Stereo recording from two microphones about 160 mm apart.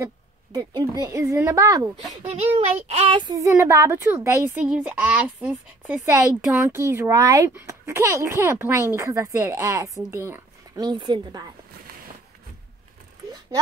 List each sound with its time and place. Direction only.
0.0 s a woman's voice: 25° right (ahead or behind)
2.2 s speech: 40° right (ahead or behind)
3.2 s speech: 25° right (ahead or behind)
10.9 s a woman's voice: 30° right (ahead or behind)